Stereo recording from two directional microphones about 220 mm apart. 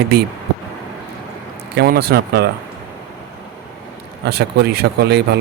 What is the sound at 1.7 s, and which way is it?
Speech, 45° right (ahead or behind).